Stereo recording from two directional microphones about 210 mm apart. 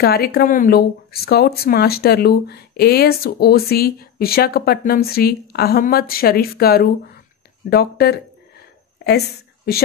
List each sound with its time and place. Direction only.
0.0 s speech: 50° left (ahead or behind)